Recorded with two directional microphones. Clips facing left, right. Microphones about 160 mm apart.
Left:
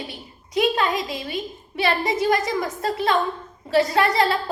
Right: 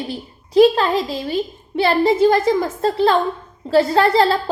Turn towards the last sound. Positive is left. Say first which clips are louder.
# right 5 dB
turn(degrees=-30)  # may be behind; listen again after turning